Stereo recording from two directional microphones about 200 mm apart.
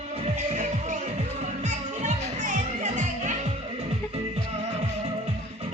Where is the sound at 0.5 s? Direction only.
40° right (ahead or behind).